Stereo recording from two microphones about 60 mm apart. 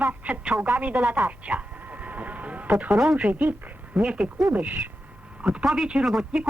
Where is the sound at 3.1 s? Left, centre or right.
Right.